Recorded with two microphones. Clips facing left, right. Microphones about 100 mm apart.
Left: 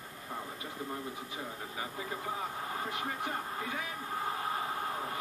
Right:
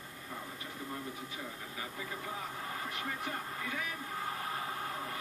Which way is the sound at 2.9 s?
25° left (ahead or behind).